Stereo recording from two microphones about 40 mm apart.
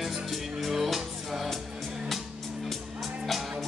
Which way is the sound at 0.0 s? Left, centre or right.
Centre.